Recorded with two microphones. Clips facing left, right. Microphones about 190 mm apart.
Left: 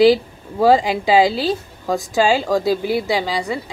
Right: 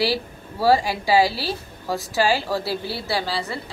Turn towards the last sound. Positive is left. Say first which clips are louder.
# left 5 dB
turn(degrees=15)  # may be behind; listen again after turning